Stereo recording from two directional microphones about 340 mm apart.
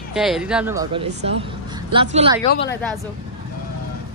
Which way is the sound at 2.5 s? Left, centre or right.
Left.